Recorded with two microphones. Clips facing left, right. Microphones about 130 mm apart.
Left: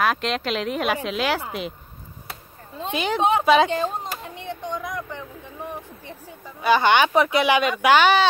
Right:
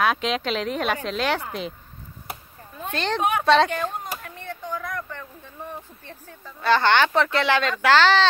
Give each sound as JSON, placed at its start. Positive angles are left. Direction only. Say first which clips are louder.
{"t": 0.0, "sound": "speech", "louder": "even", "side_deg": 0}
{"t": 2.9, "sound": "speech", "louder": "left 2 dB", "side_deg": 10}
{"t": 3.2, "sound": "a woman's voice", "louder": "left 5 dB", "side_deg": 25}
{"t": 3.6, "sound": "a sound", "louder": "left 3 dB", "side_deg": 25}
{"t": 5.7, "sound": "speech", "louder": "left 3 dB", "side_deg": 15}